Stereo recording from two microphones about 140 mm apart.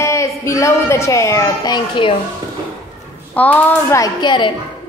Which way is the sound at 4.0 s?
35° left (ahead or behind).